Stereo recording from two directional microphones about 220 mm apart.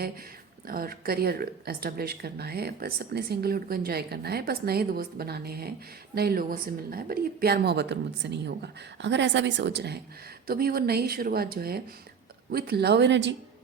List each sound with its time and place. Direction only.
0.7 s speech: 40° right (ahead or behind)